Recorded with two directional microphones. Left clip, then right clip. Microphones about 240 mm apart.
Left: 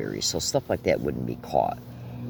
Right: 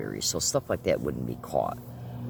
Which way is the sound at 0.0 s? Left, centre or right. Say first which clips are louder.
Left 2 dB; centre.